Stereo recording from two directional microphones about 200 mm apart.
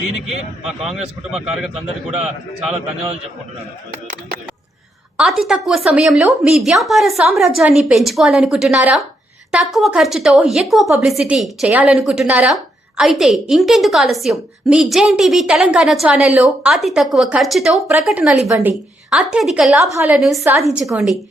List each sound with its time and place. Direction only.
0.6 s a woman's voice: centre (ahead or behind)
5.1 s a woman's voice: centre (ahead or behind)
19.9 s a woman's voice: 15° right (ahead or behind)
20.1 s a woman's voice: centre (ahead or behind)
20.4 s a woman's voice: 15° right (ahead or behind)
20.7 s a woman's voice: centre (ahead or behind)